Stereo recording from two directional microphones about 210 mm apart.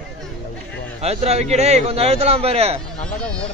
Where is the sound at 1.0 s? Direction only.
30° right (ahead or behind).